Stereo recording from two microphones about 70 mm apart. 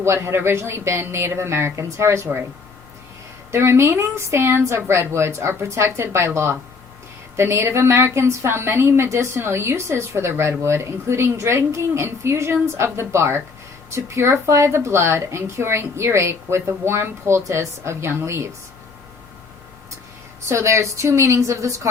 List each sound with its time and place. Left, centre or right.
0.0 s a woman's voice: right
3.5 s a woman's voice: right
20.5 s a woman's voice: right